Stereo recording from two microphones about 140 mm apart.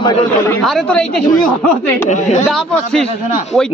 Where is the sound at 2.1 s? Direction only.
55° left (ahead or behind).